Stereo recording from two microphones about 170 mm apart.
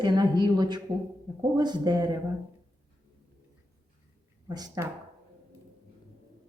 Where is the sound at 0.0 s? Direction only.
25° right (ahead or behind).